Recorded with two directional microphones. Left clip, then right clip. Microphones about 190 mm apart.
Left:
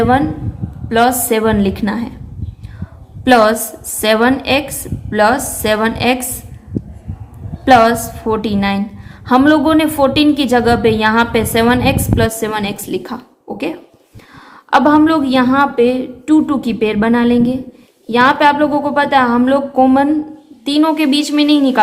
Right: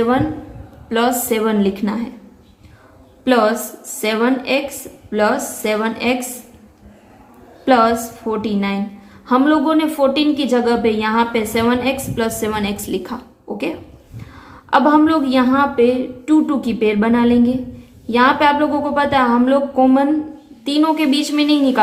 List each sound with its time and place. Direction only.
0.9 s a woman's voice: 30° left (ahead or behind)
3.2 s a woman's voice: 40° left (ahead or behind)
7.6 s a woman's voice: 40° left (ahead or behind)